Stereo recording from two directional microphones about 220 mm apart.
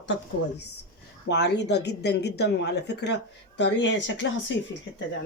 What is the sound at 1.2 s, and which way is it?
Speech, 50° left (ahead or behind).